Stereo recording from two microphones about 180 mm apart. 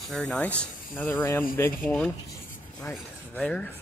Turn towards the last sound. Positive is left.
turn(degrees=5)  # may be behind; listen again after turning